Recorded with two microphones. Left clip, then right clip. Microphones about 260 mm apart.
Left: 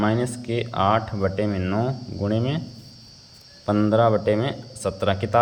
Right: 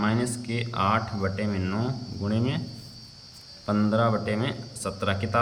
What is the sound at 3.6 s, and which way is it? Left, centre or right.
Speech, centre.